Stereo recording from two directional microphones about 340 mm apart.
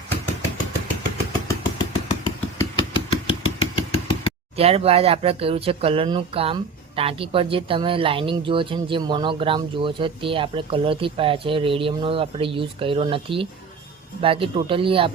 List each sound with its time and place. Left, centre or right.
1.5 s vehicle: centre
2.6 s a sound: centre
4.5 s speech: centre